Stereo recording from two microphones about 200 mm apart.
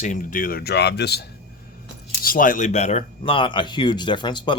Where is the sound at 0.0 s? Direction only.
40° left (ahead or behind); by 1.2 s 55° left (ahead or behind).